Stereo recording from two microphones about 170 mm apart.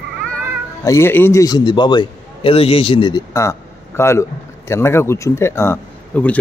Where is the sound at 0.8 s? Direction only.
15° left (ahead or behind).